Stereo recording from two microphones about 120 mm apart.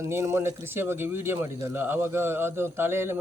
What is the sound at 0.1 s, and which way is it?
Speech, 25° right (ahead or behind).